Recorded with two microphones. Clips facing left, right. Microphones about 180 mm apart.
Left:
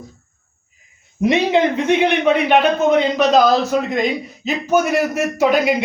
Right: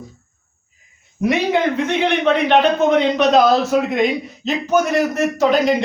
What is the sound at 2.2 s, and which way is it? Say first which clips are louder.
A man's voice: even; 10° left (ahead or behind).